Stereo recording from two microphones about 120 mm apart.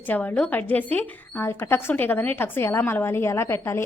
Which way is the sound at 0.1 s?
15° left (ahead or behind).